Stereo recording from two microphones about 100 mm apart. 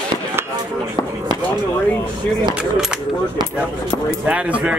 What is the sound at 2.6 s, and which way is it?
Speech, 10° right (ahead or behind).